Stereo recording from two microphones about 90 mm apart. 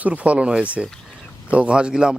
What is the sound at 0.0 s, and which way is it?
Speech, 15° right (ahead or behind).